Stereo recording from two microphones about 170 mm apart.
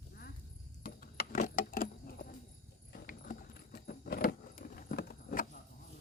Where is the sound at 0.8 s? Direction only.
60° left (ahead or behind).